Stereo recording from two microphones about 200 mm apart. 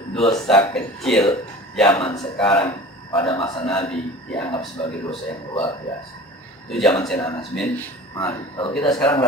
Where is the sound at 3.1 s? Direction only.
20° left (ahead or behind).